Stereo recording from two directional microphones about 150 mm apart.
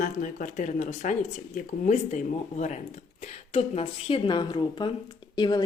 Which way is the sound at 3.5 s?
45° left (ahead or behind).